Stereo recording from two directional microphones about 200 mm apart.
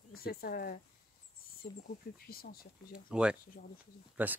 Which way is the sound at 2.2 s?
50° left (ahead or behind).